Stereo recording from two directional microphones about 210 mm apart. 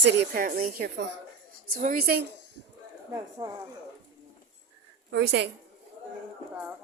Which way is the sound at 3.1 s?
20° right (ahead or behind).